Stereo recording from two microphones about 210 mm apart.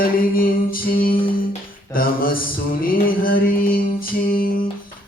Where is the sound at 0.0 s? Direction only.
45° left (ahead or behind).